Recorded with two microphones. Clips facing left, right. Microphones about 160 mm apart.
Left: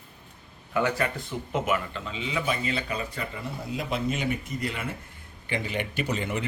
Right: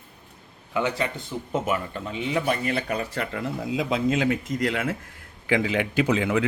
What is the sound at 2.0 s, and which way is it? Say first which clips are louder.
Speech: right 7 dB; 55° right (ahead or behind).